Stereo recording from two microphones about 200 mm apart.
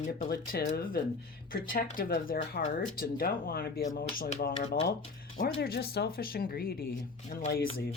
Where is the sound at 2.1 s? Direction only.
55° left (ahead or behind).